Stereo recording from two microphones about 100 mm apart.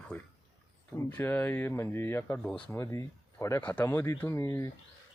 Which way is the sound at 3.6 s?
15° left (ahead or behind).